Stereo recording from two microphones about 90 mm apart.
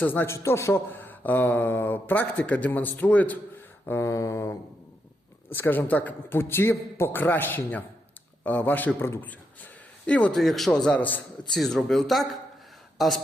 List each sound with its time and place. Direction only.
0.0 s speech: 20° left (ahead or behind)
3.8 s mantra: 35° left (ahead or behind)
5.5 s speech: 20° left (ahead or behind)
10.1 s a man's voice: 15° left (ahead or behind)
10.3 s a man's voice: centre (ahead or behind)
11.5 s speech: 5° left (ahead or behind)